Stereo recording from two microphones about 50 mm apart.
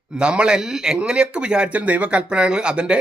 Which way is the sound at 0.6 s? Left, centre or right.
Centre.